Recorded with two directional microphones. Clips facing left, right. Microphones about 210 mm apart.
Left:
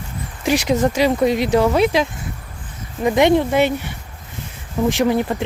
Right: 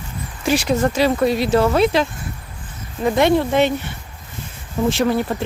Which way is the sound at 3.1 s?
15° left (ahead or behind).